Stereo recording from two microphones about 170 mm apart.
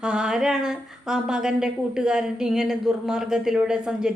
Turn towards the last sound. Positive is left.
turn(degrees=-5)  # may be behind; listen again after turning